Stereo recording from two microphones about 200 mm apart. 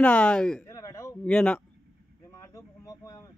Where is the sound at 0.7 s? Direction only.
15° left (ahead or behind).